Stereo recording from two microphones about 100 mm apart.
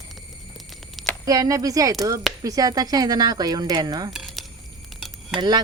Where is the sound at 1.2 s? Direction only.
35° right (ahead or behind).